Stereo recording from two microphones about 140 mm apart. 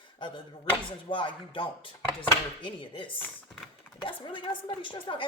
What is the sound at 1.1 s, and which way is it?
A woman's voice, 35° left (ahead or behind).